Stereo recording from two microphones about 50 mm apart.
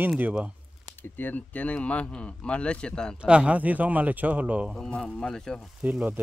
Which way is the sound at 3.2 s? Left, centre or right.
Right.